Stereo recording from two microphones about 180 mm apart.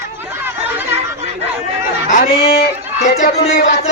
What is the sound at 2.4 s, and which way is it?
Speech, 60° left (ahead or behind).